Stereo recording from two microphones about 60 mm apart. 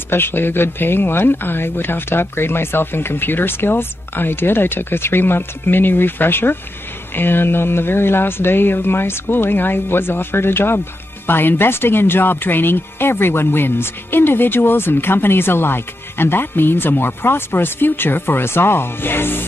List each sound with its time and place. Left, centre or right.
0.1 s speech: left